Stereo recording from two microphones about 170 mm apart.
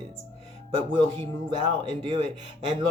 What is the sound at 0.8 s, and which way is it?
Speech, 35° right (ahead or behind).